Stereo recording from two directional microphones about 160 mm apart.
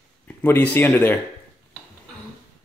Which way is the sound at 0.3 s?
10° left (ahead or behind).